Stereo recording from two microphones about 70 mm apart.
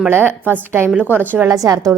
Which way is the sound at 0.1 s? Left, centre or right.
Right.